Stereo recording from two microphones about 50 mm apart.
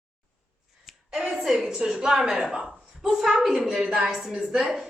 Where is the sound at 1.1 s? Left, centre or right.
Centre.